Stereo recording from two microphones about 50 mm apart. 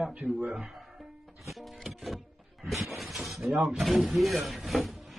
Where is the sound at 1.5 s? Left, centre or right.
Centre.